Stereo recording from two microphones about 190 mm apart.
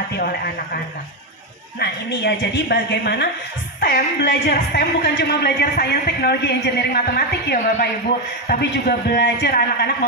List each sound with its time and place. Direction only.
1.8 s a woman's voice: 60° left (ahead or behind)